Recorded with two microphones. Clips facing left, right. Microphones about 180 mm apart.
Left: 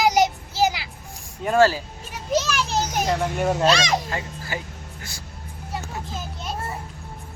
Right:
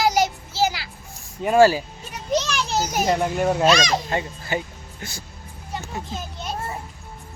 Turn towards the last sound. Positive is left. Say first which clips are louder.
# right 1 dB
turn(degrees=0)  # may be behind; listen again after turning